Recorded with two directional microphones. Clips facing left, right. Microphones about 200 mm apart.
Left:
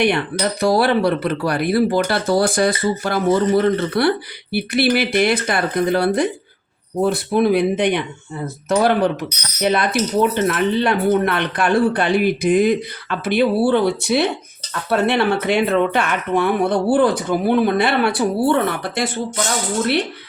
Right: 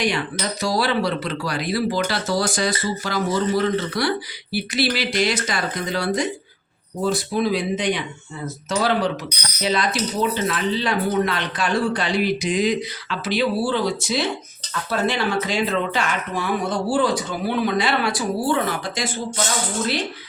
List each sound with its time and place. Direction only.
0.0 s speech: 60° left (ahead or behind)